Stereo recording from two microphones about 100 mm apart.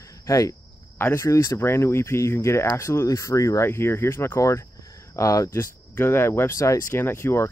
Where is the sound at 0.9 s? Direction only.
25° left (ahead or behind).